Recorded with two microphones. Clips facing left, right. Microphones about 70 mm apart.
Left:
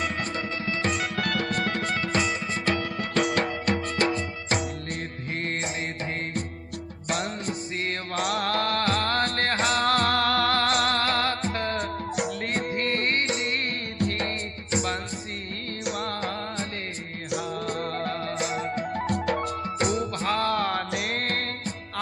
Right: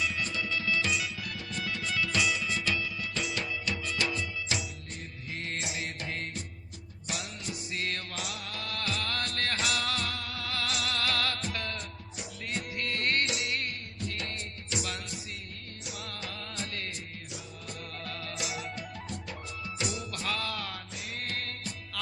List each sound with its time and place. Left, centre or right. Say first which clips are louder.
0.0 s music: left 4 dB; left
7.1 s music: left 9 dB; left
8.2 s music: left 14 dB; left
12.1 s music: left 8 dB; left